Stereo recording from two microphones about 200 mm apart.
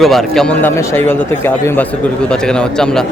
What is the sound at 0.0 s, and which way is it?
Speech, centre (ahead or behind).